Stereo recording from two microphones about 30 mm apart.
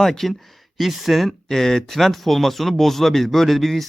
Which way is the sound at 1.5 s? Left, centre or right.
Centre.